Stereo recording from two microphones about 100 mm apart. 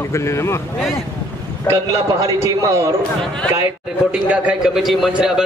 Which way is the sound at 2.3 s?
30° right (ahead or behind).